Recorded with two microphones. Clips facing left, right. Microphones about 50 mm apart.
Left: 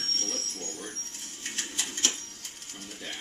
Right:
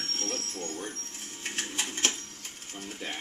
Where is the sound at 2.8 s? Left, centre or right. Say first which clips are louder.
Right 3 dB; right.